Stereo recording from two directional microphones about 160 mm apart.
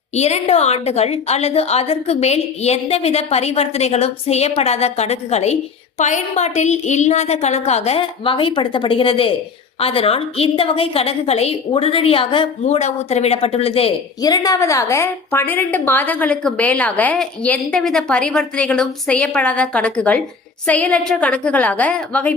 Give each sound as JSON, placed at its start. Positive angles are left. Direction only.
{"t": 0.2, "sound": "a woman's voice", "side_deg": 40}
{"t": 14.2, "sound": "a woman's voice", "side_deg": 25}